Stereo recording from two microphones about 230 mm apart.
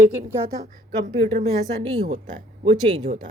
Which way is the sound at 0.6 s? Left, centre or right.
Right.